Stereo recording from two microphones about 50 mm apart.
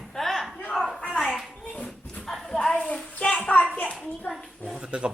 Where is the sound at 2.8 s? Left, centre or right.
Left.